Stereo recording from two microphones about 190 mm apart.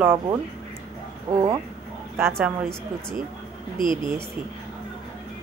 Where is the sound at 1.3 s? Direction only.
20° right (ahead or behind).